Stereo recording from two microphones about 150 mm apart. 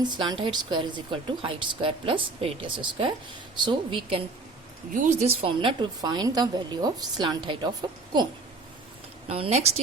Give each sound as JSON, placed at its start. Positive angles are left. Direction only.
{"t": 0.0, "sound": "speech", "side_deg": -30}
{"t": 4.9, "sound": "a woman's voice", "side_deg": -50}
{"t": 9.2, "sound": "speech", "side_deg": -40}